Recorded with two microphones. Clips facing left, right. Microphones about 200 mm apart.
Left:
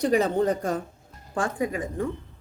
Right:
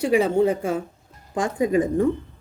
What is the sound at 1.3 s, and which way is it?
Speech, 20° right (ahead or behind).